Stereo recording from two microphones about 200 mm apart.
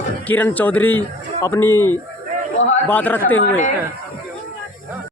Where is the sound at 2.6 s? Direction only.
70° left (ahead or behind).